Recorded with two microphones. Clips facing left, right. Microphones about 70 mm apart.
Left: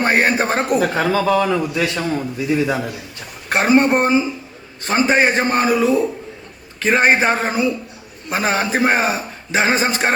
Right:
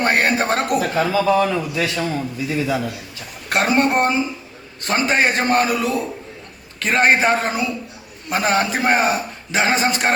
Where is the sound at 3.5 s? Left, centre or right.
Centre.